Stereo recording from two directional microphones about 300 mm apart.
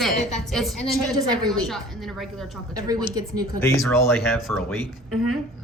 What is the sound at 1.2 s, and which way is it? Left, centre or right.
Speech, centre.